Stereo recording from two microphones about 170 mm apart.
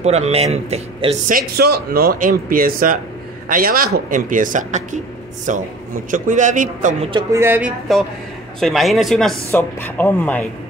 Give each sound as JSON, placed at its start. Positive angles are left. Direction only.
{"t": 0.0, "sound": "speech", "side_deg": -40}
{"t": 1.3, "sound": "speech", "side_deg": -65}
{"t": 7.3, "sound": "speech", "side_deg": -10}
{"t": 8.5, "sound": "a man's voice", "side_deg": 0}
{"t": 9.5, "sound": "speech", "side_deg": 10}